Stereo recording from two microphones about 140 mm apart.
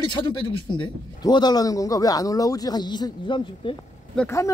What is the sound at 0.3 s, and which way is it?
A man's voice, 35° left (ahead or behind).